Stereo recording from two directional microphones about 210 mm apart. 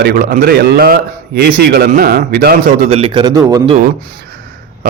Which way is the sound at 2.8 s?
25° right (ahead or behind).